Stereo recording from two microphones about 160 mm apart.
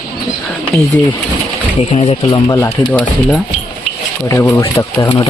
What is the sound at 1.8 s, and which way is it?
Speech, 45° left (ahead or behind).